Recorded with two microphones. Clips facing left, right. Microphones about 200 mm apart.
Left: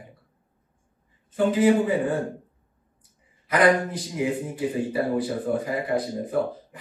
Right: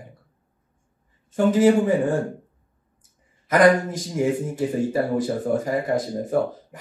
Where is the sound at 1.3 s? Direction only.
45° right (ahead or behind).